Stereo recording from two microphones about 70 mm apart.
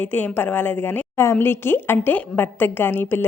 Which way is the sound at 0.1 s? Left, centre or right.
Left.